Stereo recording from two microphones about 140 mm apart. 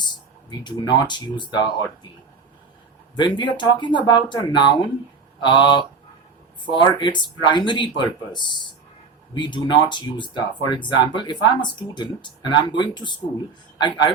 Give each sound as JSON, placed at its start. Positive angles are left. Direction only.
{"t": 0.6, "sound": "speech", "side_deg": 30}
{"t": 3.2, "sound": "speech", "side_deg": 35}